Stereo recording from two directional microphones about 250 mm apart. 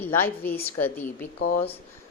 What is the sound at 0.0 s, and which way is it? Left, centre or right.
A woman's voice, centre.